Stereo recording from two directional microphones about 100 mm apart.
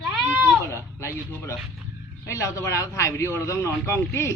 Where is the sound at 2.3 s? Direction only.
30° left (ahead or behind).